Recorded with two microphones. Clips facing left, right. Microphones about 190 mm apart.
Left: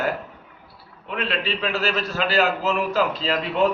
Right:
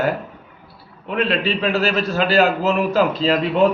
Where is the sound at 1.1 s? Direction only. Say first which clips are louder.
Right 6 dB; 40° right (ahead or behind).